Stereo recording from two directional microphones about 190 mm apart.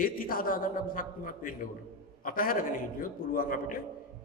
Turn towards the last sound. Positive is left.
turn(degrees=45)  # may be behind; listen again after turning